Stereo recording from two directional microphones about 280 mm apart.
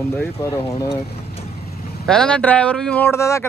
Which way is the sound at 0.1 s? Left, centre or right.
Centre.